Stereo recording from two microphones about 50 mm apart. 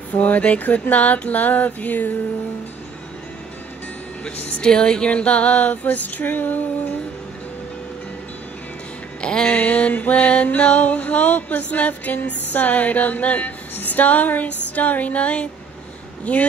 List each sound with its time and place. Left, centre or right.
0.1 s music: left
4.4 s female singing: left
4.6 s female singing: centre; by 7.0 s left
9.2 s a sound: centre
9.5 s music: left
16.3 s female singing: left